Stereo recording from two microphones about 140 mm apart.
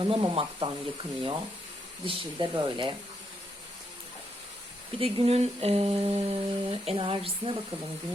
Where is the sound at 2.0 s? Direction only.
35° right (ahead or behind).